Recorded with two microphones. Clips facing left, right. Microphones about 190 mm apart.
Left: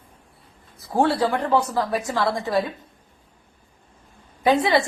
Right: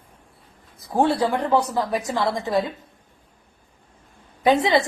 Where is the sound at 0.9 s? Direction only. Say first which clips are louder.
Even; 15° right (ahead or behind).